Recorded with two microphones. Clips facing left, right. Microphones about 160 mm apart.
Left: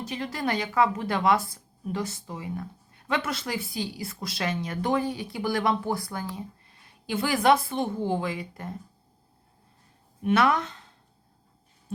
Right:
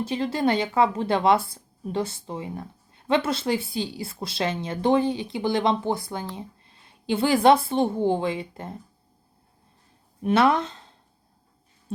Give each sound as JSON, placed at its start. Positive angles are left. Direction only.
{"t": 0.0, "sound": "speech", "side_deg": -30}
{"t": 10.2, "sound": "speech", "side_deg": -30}